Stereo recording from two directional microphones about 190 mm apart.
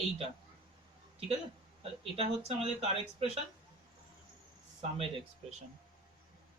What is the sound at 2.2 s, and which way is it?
Speech, 35° right (ahead or behind).